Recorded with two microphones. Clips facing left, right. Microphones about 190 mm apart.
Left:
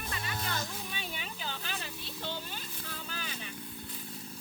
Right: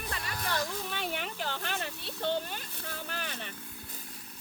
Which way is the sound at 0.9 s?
75° right (ahead or behind).